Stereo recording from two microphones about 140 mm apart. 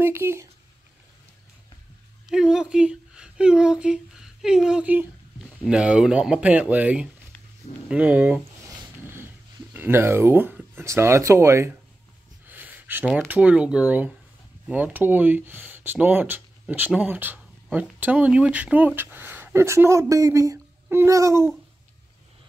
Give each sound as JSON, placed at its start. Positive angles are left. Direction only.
{"t": 0.0, "sound": "speech", "side_deg": -15}
{"t": 2.2, "sound": "speech", "side_deg": -5}
{"t": 8.6, "sound": "wood", "side_deg": -15}
{"t": 9.8, "sound": "speech", "side_deg": -15}
{"t": 12.4, "sound": "a sound", "side_deg": -15}
{"t": 13.3, "sound": "speech", "side_deg": -10}